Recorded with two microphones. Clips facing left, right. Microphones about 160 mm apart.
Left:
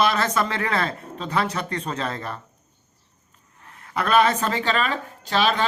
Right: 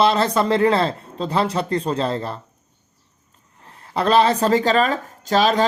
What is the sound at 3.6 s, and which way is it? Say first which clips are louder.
A man's voice: right 5 dB; 30° right (ahead or behind).